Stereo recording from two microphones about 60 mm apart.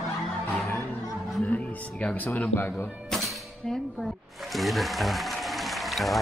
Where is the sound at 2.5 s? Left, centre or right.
Left.